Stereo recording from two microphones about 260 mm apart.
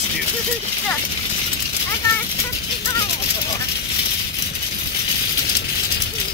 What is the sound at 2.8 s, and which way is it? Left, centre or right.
Speech, left.